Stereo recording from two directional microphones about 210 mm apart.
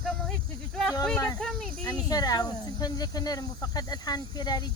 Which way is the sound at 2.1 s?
20° left (ahead or behind).